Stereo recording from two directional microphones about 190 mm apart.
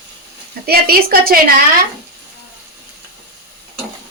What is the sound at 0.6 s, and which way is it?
A woman's voice, 55° right (ahead or behind).